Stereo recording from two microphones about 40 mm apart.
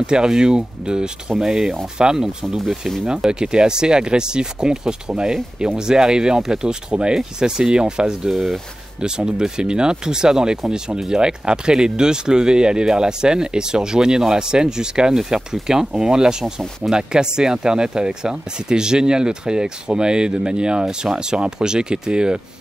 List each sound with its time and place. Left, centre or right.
0.0 s speech: centre
8.3 s speech: centre
9.0 s speech: centre